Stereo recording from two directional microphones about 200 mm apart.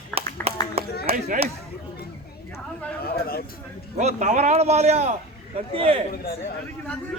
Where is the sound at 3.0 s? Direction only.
50° left (ahead or behind).